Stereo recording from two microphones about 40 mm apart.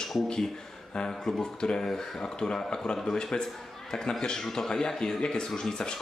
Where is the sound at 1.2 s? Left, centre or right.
Centre.